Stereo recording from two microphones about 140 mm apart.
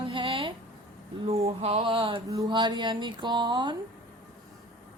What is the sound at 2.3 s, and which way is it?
Speech, 25° right (ahead or behind).